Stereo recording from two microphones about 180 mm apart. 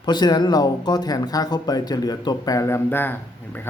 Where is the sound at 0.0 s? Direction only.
25° left (ahead or behind).